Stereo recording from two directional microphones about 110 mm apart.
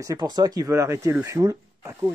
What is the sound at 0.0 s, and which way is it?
Speech, 35° right (ahead or behind).